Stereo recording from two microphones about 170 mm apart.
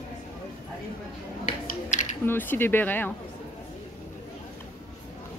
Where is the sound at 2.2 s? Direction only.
10° left (ahead or behind).